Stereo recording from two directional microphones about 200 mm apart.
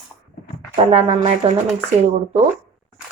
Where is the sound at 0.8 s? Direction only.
30° right (ahead or behind).